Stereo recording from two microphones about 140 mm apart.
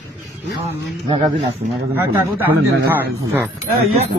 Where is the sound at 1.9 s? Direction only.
15° right (ahead or behind).